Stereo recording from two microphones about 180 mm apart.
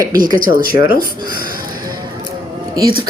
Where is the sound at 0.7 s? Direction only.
60° left (ahead or behind).